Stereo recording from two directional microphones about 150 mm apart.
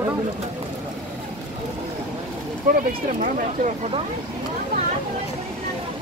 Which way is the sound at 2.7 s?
75° right (ahead or behind).